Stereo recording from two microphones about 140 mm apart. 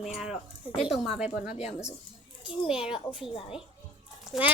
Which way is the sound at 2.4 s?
5° right (ahead or behind).